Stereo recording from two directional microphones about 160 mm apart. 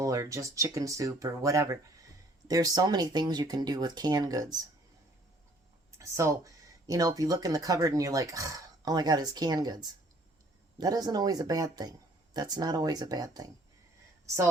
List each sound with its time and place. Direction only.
0.0 s speech: 20° right (ahead or behind)
6.0 s speech: 20° right (ahead or behind)